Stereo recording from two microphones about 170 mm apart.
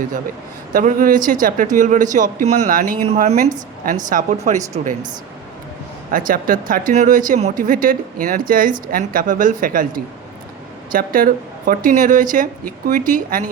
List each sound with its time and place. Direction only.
0.7 s speech: 55° right (ahead or behind)
6.1 s speech: 55° right (ahead or behind)